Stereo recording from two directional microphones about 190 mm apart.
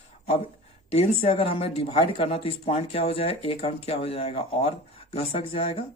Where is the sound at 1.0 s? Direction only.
30° left (ahead or behind).